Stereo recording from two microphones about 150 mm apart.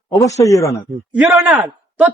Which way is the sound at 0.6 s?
20° left (ahead or behind).